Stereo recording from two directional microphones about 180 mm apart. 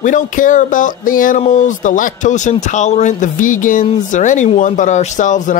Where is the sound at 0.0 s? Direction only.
45° left (ahead or behind).